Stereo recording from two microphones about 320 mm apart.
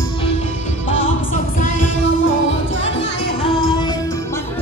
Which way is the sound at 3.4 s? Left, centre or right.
Centre.